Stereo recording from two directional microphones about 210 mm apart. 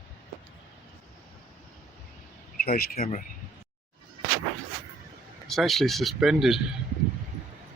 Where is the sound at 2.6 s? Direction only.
45° left (ahead or behind).